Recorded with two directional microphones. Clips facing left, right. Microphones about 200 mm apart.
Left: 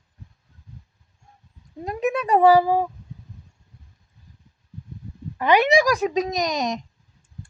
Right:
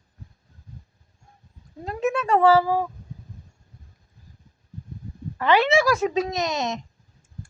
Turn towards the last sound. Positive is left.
turn(degrees=15)  # may be behind; listen again after turning